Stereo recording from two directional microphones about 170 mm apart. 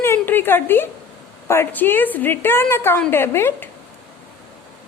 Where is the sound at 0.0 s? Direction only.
15° left (ahead or behind).